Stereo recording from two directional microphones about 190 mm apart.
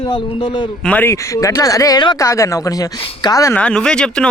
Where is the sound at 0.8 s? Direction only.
10° left (ahead or behind).